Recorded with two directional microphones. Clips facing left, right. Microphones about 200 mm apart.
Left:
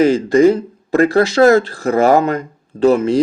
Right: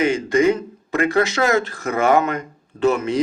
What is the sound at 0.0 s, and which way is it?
Speech, 35° left (ahead or behind).